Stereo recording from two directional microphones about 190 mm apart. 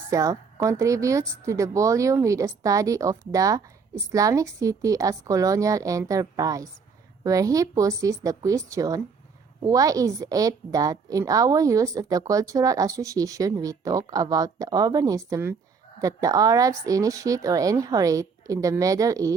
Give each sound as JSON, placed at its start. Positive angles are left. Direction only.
{"t": 0.1, "sound": "a woman's voice", "side_deg": -15}